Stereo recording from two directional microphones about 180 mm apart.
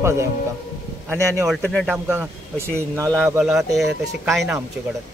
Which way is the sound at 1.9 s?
10° right (ahead or behind).